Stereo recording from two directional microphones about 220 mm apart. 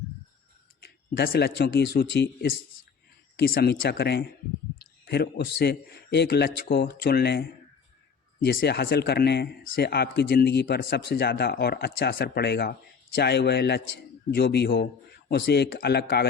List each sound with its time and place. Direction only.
0.8 s speech: 45° left (ahead or behind)